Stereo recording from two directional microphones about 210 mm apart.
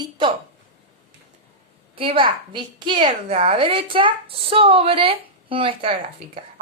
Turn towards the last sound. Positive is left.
turn(degrees=-25)  # may be behind; listen again after turning